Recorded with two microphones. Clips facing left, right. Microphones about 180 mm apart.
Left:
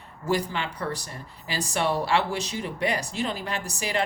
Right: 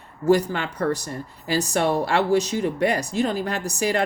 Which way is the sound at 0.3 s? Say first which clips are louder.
Right 7 dB; 45° right (ahead or behind).